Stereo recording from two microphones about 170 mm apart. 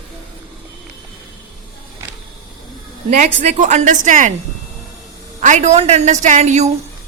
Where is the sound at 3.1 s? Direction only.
45° right (ahead or behind).